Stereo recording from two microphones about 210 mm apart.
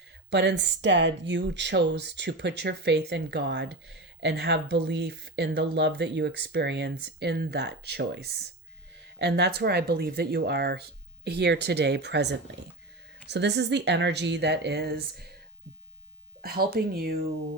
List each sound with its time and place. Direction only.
0.3 s speech: 55° right (ahead or behind)
16.4 s speech: 45° right (ahead or behind)